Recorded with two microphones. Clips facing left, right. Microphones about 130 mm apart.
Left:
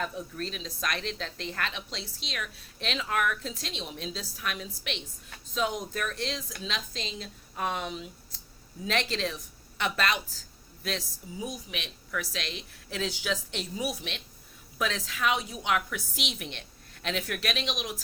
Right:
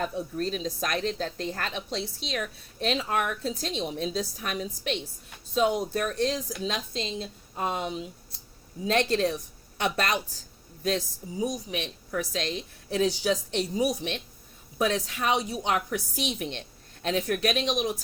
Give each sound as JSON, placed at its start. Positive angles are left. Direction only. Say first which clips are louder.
{"t": 0.0, "sound": "a woman's voice", "louder": "right 5 dB", "side_deg": -30}
{"t": 5.5, "sound": "a woman's voice", "louder": "right 6 dB", "side_deg": -25}
{"t": 9.1, "sound": "a woman's voice", "louder": "right 7 dB", "side_deg": -45}
{"t": 11.4, "sound": "a woman's voice", "louder": "right 7 dB", "side_deg": -35}